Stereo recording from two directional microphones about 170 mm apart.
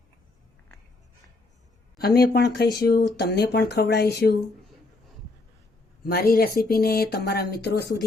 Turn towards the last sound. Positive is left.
turn(degrees=75)  # may be behind; listen again after turning